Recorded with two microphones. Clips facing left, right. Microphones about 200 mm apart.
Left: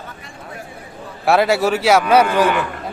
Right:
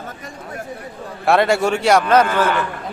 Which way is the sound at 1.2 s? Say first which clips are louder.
Even; centre (ahead or behind).